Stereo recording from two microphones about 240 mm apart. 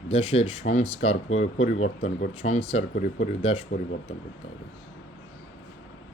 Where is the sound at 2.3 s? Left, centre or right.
Left.